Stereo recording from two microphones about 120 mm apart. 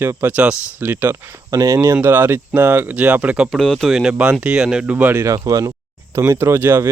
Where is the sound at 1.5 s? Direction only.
30° right (ahead or behind); by 3.5 s 10° right (ahead or behind).